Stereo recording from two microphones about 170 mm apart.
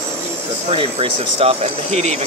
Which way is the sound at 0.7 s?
35° right (ahead or behind).